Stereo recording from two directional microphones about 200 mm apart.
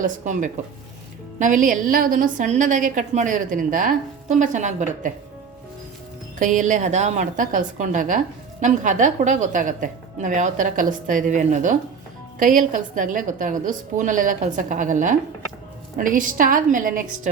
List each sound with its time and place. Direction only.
0.0 s a woman's voice: 40° right (ahead or behind)
6.4 s a woman's voice: 40° right (ahead or behind)